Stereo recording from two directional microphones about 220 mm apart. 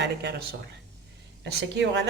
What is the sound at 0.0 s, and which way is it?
Speech, 50° right (ahead or behind).